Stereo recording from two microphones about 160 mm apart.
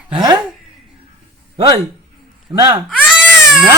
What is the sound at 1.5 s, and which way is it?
A man's voice, 30° right (ahead or behind).